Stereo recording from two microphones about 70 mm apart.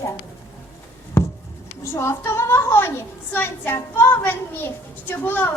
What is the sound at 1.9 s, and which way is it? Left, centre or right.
A woman's voice, left.